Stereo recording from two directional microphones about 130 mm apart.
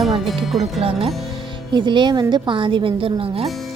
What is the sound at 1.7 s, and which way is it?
A woman's voice, 35° right (ahead or behind).